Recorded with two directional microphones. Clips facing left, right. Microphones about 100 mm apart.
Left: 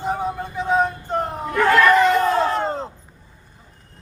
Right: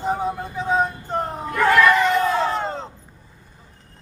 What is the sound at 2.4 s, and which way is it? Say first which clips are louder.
Crowd: left 2 dB; centre (ahead or behind).